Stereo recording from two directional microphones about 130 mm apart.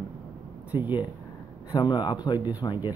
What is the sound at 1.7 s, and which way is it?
Speech, 35° left (ahead or behind).